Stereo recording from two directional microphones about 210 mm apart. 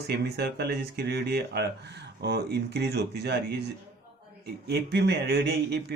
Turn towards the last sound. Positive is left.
turn(degrees=-50)  # may be behind; listen again after turning